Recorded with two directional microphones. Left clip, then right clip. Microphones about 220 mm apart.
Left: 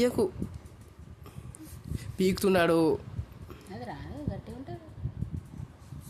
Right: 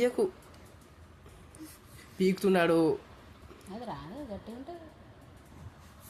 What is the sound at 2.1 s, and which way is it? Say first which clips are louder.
Speech: left 1 dB; 45° left (ahead or behind).